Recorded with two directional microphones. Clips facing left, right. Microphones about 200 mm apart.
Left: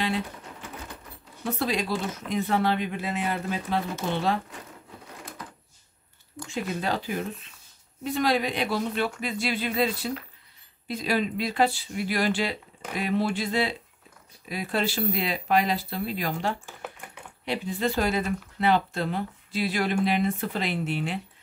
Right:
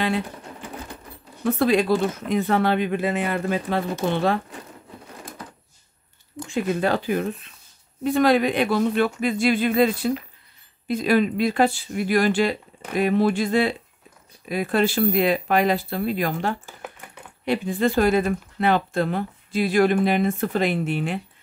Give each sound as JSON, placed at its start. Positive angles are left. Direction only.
{"t": 1.4, "sound": "speech", "side_deg": -55}
{"t": 6.5, "sound": "speech", "side_deg": -55}